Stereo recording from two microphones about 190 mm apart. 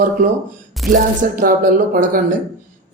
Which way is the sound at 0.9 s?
45° right (ahead or behind).